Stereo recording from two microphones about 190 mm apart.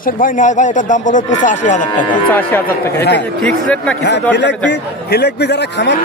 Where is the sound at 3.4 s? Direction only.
5° left (ahead or behind).